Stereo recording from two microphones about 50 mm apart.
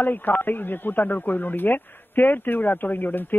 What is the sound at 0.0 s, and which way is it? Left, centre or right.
Speech, left.